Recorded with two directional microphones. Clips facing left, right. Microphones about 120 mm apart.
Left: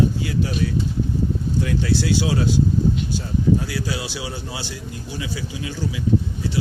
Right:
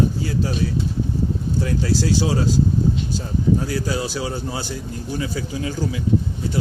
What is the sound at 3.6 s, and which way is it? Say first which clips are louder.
Speech: right 3 dB; 45° right (ahead or behind).